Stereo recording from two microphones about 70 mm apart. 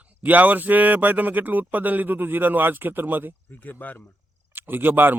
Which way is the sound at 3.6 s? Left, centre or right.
Left.